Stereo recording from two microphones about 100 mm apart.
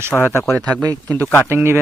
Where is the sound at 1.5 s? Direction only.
25° right (ahead or behind).